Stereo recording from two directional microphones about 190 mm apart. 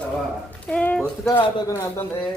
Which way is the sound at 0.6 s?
5° left (ahead or behind).